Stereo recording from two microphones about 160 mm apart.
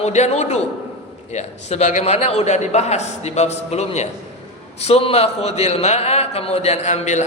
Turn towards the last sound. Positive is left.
turn(degrees=45)  # may be behind; listen again after turning